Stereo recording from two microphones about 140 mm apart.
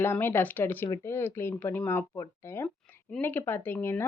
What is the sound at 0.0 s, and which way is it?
Speech, 15° left (ahead or behind).